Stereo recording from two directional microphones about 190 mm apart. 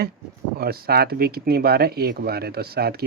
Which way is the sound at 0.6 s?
55° right (ahead or behind).